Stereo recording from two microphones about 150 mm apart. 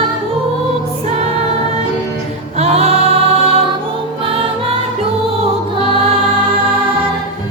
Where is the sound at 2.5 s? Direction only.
45° right (ahead or behind).